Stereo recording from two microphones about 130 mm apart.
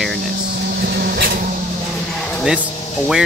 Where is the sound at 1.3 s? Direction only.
90° right.